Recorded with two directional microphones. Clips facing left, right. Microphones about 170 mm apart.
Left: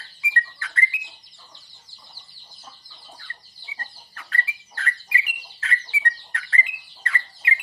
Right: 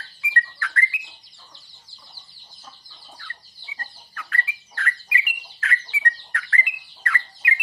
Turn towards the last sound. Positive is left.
turn(degrees=30)  # may be behind; listen again after turning